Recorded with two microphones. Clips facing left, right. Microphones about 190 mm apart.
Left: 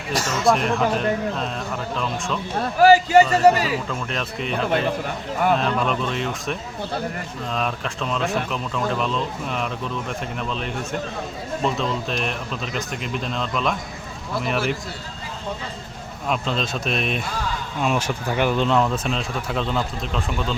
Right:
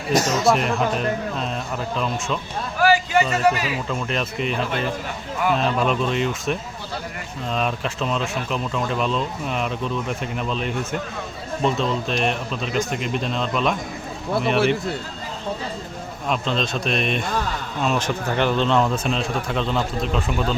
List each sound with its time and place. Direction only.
0.2 s speech: 40° right (ahead or behind)
0.4 s speech: centre (ahead or behind)
2.0 s speech: centre (ahead or behind)
2.6 s speech: 35° left (ahead or behind)
3.8 s speech: centre (ahead or behind)
5.5 s speech: centre (ahead or behind)
16.3 s speech: 5° left (ahead or behind)